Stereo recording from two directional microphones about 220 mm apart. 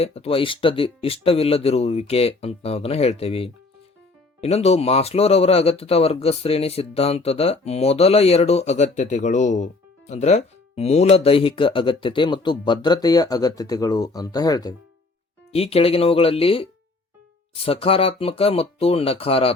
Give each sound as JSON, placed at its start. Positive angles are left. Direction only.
{"t": 0.0, "sound": "speech", "side_deg": 30}
{"t": 15.5, "sound": "speech", "side_deg": 25}